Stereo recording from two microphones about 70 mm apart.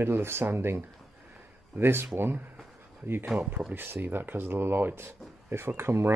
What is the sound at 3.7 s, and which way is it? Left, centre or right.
Speech, right.